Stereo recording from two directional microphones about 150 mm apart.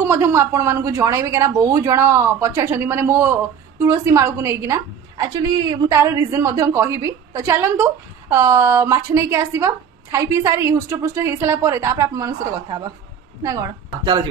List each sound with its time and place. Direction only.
0.1 s a woman's voice: 20° right (ahead or behind)